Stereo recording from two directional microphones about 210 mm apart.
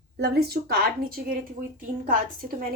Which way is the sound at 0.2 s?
50° right (ahead or behind).